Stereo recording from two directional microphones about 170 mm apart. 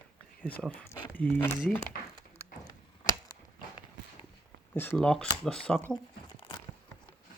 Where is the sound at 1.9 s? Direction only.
55° left (ahead or behind).